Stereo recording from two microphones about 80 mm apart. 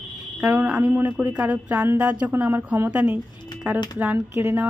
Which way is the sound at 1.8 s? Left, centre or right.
Right.